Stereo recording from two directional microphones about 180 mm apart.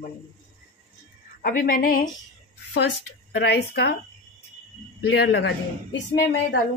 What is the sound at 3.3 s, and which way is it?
Speech, 70° left (ahead or behind).